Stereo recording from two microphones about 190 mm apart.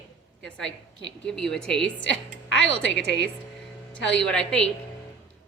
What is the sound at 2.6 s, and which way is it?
Speech, 80° left.